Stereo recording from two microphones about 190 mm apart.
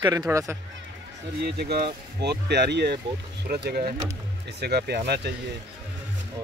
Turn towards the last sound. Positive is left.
turn(degrees=-60)  # may be behind; listen again after turning